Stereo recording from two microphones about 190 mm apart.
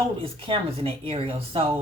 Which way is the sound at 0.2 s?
30° right (ahead or behind).